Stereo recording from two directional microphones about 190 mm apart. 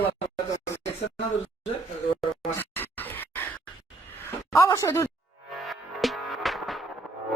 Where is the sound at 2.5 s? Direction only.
10° left (ahead or behind).